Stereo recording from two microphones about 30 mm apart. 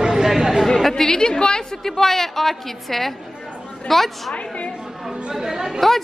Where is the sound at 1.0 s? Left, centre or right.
Left.